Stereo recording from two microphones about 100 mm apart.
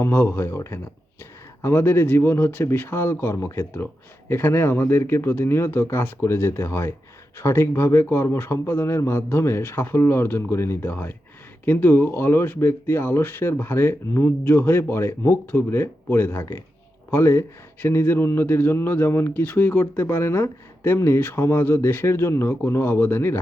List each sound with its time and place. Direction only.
0.0 s a man's voice: 20° left (ahead or behind)